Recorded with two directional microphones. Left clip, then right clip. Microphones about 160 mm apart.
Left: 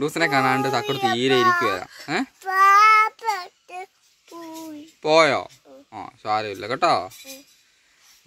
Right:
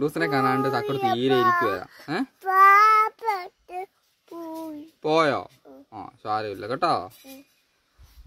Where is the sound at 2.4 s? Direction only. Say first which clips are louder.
Left 1 dB; 70° right (ahead or behind).